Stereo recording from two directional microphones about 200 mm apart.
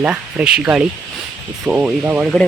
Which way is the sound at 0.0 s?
5° right (ahead or behind).